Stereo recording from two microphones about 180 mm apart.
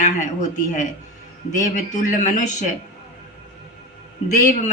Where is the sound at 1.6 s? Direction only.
45° left (ahead or behind).